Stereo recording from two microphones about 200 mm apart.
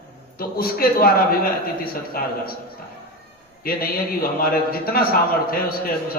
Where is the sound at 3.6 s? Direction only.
50° left (ahead or behind).